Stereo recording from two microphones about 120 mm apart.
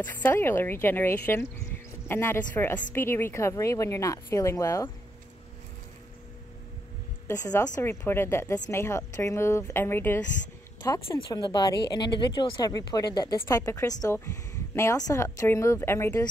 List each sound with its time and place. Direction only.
0.0 s a woman's voice: 15° left (ahead or behind)
7.2 s a woman's voice: 30° left (ahead or behind)